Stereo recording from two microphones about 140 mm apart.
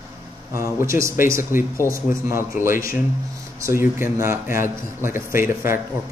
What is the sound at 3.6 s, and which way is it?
A man's voice, 20° right (ahead or behind).